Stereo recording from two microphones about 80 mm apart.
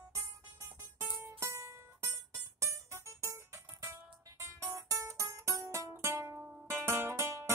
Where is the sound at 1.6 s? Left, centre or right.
Right.